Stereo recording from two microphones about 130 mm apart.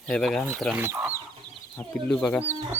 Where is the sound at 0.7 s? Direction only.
20° right (ahead or behind).